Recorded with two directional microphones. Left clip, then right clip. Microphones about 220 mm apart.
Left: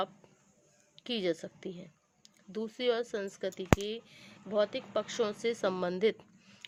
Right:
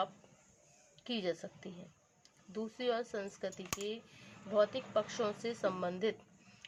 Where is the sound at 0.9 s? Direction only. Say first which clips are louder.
Left 5 dB; 45° left (ahead or behind).